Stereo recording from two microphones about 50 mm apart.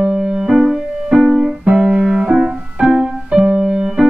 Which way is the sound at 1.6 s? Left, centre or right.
Right.